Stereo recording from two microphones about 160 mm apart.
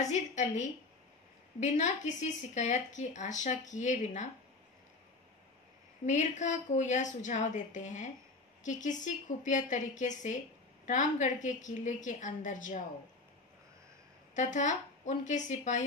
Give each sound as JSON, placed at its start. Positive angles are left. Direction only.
{"t": 0.0, "sound": "speech", "side_deg": 50}
{"t": 6.0, "sound": "speech", "side_deg": 50}
{"t": 14.3, "sound": "speech", "side_deg": 50}